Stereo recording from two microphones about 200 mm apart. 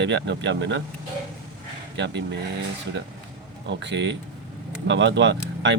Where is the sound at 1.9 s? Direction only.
60° right (ahead or behind).